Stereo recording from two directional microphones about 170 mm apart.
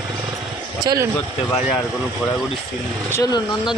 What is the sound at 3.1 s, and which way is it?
Speech, 20° left (ahead or behind).